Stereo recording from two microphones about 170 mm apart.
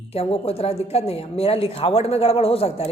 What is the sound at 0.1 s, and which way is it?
Speech, 35° left (ahead or behind).